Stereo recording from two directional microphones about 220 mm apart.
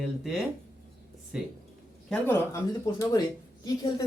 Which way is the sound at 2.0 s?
10° left (ahead or behind).